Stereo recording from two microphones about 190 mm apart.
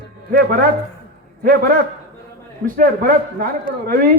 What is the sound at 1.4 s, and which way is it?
A man's voice, 50° right (ahead or behind).